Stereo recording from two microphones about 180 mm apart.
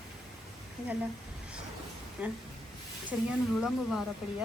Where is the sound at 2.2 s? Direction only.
5° right (ahead or behind).